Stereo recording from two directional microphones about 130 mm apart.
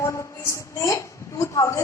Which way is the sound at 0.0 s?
20° left (ahead or behind).